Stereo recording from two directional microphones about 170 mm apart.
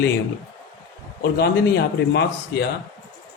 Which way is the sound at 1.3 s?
70° left (ahead or behind).